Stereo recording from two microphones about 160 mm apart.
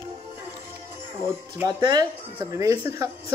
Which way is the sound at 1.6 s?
25° right (ahead or behind).